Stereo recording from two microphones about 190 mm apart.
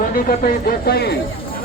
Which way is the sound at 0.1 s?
50° left (ahead or behind).